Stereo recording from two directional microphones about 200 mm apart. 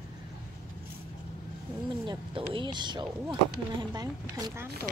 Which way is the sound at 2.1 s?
25° right (ahead or behind).